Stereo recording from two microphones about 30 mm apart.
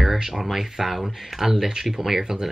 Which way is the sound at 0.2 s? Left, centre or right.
Centre.